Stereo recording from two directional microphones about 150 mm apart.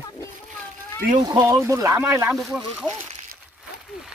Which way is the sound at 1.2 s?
25° right (ahead or behind).